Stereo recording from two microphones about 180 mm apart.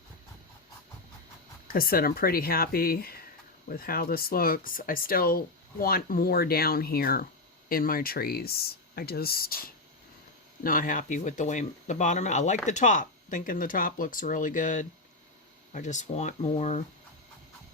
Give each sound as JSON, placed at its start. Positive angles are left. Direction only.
{"t": 1.6, "sound": "speech", "side_deg": 55}